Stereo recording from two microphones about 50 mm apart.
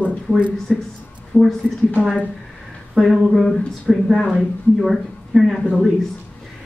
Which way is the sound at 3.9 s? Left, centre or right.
Centre.